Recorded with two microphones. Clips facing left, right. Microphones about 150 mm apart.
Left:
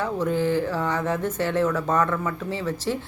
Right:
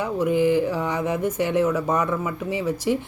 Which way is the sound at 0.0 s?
15° right (ahead or behind).